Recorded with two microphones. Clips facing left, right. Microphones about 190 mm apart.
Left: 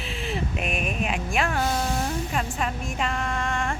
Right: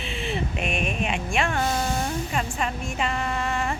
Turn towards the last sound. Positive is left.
turn(degrees=-5)  # may be behind; listen again after turning